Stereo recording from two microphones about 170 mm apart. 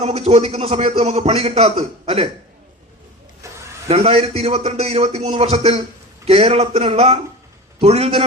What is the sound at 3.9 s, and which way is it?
A man's voice, 35° right (ahead or behind).